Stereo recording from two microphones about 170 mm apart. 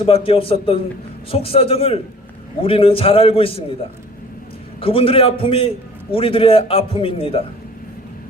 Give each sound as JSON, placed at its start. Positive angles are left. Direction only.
{"t": 0.0, "sound": "a man's voice", "side_deg": 35}
{"t": 4.8, "sound": "a man's voice", "side_deg": 30}